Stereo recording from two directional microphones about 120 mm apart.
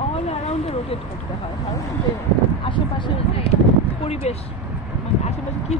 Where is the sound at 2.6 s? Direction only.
40° left (ahead or behind).